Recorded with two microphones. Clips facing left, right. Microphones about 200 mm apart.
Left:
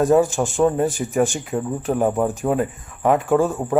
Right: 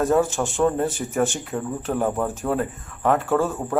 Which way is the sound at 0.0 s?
15° left (ahead or behind).